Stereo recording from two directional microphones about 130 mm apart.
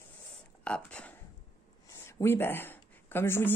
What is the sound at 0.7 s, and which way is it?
Speech, 10° left (ahead or behind).